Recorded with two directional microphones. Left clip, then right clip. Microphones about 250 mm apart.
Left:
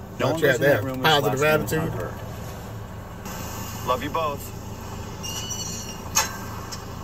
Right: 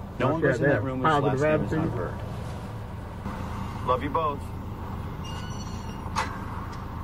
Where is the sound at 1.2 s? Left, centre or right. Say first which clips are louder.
Left 3 dB; centre.